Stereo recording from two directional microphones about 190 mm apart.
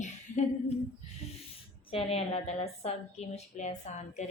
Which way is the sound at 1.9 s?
30° left (ahead or behind).